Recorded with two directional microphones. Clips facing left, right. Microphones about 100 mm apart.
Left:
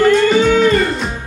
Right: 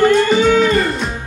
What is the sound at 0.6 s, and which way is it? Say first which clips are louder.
Music: left 1 dB; centre (ahead or behind).